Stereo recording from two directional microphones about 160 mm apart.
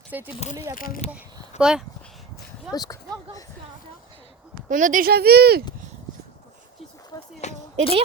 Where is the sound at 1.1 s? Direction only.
5° right (ahead or behind).